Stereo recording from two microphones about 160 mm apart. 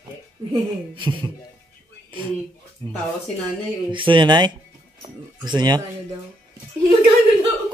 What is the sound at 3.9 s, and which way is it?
Speech, 30° right (ahead or behind).